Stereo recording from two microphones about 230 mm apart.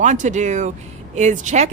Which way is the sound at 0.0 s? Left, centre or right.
Right.